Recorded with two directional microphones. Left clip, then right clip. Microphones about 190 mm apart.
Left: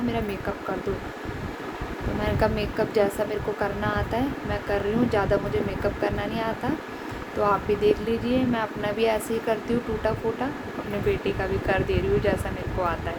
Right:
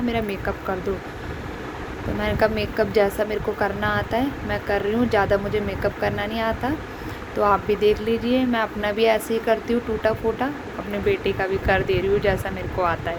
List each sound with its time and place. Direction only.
2.2 s speech: 10° right (ahead or behind)